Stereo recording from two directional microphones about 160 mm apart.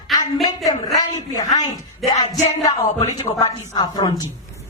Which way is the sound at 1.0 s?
25° left (ahead or behind).